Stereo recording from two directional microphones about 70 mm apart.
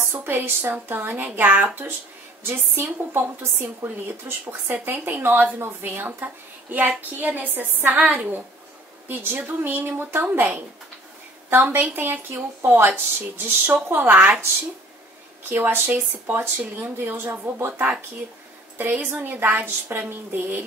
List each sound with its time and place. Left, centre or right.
0.0 s a woman's voice: right
11.5 s a woman's voice: right
15.5 s a woman's voice: right